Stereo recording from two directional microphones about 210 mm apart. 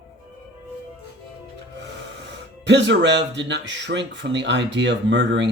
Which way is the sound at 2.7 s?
55° right (ahead or behind).